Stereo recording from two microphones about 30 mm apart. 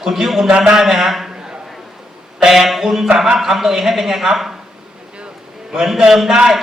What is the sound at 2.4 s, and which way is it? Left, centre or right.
A man's voice, centre.